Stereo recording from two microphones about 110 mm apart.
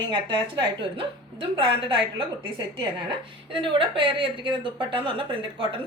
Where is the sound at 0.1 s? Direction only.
50° right (ahead or behind).